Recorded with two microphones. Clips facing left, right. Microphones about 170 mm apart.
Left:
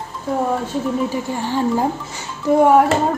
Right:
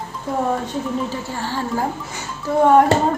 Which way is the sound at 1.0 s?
15° left (ahead or behind).